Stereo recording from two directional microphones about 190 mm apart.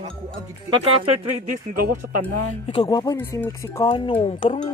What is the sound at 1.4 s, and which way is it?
Speech, 50° right (ahead or behind).